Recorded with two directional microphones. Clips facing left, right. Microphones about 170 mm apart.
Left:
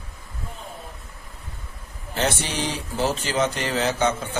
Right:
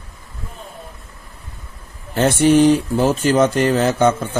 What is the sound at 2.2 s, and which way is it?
Speech, 50° right (ahead or behind).